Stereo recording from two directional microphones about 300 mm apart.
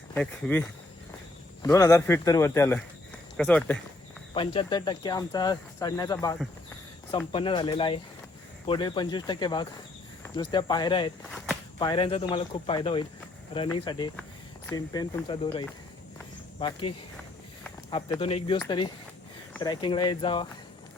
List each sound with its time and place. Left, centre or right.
0.1 s speech: centre
4.4 s speech: centre
7.3 s speech: centre
17.9 s speech: centre